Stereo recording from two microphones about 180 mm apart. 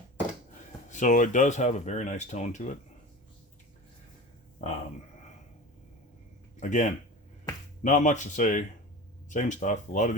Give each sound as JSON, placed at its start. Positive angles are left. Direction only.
{"t": 0.9, "sound": "speech", "side_deg": 45}
{"t": 4.6, "sound": "speech", "side_deg": 40}
{"t": 6.6, "sound": "speech", "side_deg": 45}